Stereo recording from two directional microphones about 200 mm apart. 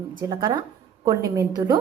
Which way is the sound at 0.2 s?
20° right (ahead or behind).